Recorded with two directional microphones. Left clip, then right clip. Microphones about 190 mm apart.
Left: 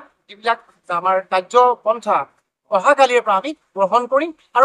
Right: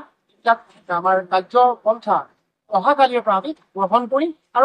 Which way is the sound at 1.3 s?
5° left (ahead or behind).